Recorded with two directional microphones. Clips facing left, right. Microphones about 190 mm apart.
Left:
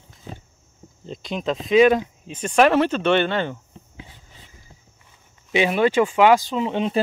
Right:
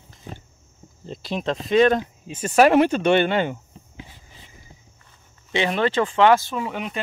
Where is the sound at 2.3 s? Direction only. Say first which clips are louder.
Right 1 dB; 5° right (ahead or behind).